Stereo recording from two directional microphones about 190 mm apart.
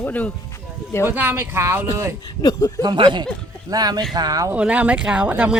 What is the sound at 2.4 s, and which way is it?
Speech, 15° left (ahead or behind).